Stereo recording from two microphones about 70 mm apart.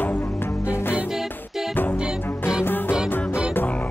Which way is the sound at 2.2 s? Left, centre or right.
Left.